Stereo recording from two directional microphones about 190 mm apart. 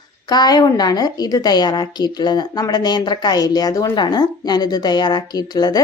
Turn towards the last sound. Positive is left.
turn(degrees=20)  # may be behind; listen again after turning